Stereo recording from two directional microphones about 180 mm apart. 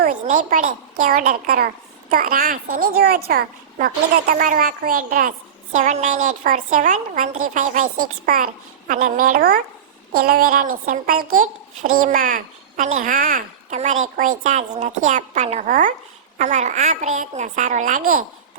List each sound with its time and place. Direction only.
0.0 s a woman's voice: 45° right (ahead or behind)